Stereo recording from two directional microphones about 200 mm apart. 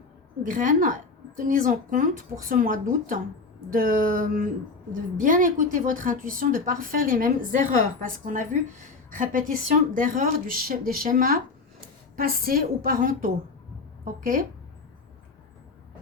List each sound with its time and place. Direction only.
0.4 s a woman's voice: 40° right (ahead or behind)